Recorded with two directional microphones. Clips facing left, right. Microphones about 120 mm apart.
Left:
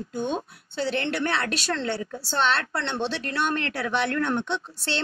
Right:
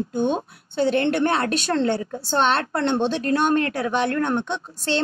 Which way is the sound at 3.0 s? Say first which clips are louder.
Right 6 dB; 45° right (ahead or behind).